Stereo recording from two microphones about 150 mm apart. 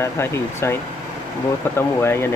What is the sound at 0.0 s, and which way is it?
Speech, 15° left (ahead or behind).